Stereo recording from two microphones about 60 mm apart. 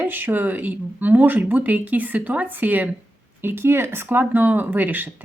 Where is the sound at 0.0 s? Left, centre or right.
Right.